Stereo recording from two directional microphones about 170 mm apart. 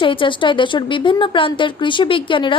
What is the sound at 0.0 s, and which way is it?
A woman's voice, 30° left (ahead or behind).